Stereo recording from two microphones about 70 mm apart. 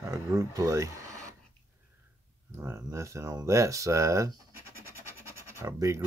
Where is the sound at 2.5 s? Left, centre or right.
Right.